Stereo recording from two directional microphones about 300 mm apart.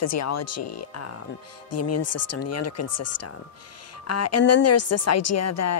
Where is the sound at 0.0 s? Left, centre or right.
Left.